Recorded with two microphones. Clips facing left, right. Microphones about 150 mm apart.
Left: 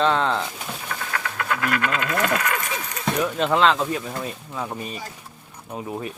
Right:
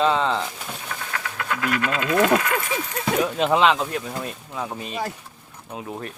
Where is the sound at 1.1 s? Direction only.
60° left (ahead or behind).